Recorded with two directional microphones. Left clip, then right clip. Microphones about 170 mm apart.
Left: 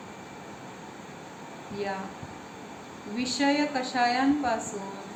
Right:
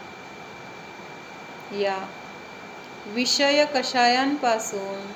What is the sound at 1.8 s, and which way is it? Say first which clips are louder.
Speech: right 8 dB; 40° right (ahead or behind).